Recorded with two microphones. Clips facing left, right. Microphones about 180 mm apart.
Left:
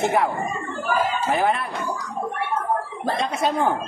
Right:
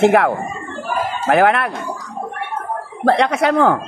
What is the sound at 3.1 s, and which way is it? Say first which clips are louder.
Speech: right 9 dB; 75° right (ahead or behind).